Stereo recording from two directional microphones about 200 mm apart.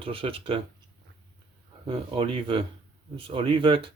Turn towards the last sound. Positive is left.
turn(degrees=-25)  # may be behind; listen again after turning